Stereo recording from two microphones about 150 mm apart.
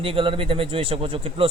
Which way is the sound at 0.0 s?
40° right (ahead or behind).